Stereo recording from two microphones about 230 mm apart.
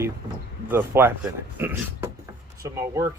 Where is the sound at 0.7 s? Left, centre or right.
Centre.